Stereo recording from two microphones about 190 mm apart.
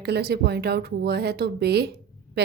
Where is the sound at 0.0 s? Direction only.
60° right (ahead or behind).